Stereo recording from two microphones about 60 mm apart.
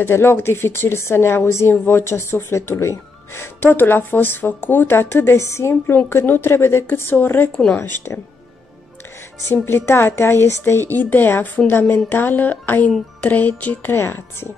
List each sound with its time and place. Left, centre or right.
0.0 s speech: left
3.6 s a woman's voice: left
6.2 s a woman's voice: left
9.5 s a woman's voice: left
13.2 s music: left
13.9 s a woman's voice: left